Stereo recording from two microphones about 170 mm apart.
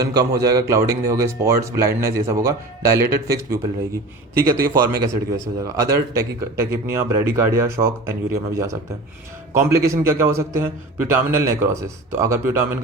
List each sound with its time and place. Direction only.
0.0 s a man's voice: 20° right (ahead or behind)